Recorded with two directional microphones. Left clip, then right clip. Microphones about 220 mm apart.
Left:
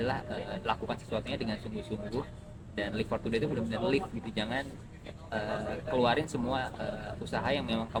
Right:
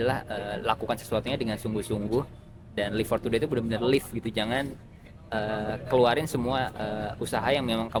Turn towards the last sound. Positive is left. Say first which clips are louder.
# right 6 dB
turn(degrees=-50)  # may be behind; listen again after turning